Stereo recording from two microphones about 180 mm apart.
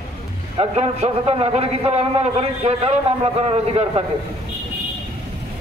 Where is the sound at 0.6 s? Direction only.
35° right (ahead or behind).